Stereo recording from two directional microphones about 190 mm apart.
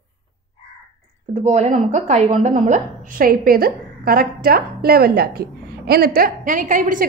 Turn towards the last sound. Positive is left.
turn(degrees=-45)  # may be behind; listen again after turning